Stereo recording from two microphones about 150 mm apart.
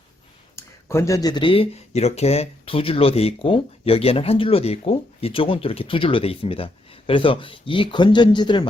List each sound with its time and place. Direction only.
0.5 s speech: 20° left (ahead or behind)